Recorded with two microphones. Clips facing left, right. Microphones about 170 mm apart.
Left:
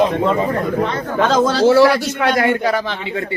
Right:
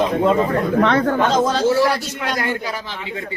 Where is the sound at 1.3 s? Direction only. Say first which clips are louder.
Left 4 dB; 80° left.